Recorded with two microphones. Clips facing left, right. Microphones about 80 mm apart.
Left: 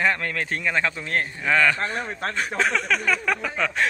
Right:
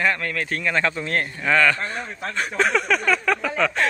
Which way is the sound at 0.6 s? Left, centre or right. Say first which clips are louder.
Right 3 dB; centre.